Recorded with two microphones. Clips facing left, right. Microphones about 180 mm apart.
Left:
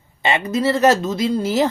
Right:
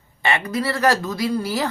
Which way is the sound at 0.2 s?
20° left (ahead or behind).